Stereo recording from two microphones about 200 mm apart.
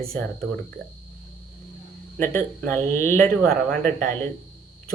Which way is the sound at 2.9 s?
40° right (ahead or behind).